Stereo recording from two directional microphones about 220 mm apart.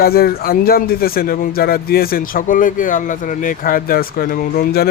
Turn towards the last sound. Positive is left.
turn(degrees=45)  # may be behind; listen again after turning